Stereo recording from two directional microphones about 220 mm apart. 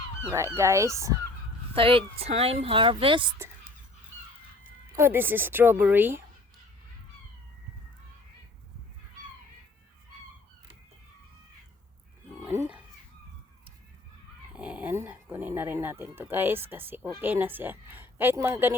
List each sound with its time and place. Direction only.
0.3 s speech: 15° right (ahead or behind)
1.7 s speech: 25° right (ahead or behind)
3.3 s a sound: 10° right (ahead or behind)
4.9 s speech: 10° right (ahead or behind)
12.5 s livestock: 10° right (ahead or behind)
14.5 s speech: 5° right (ahead or behind)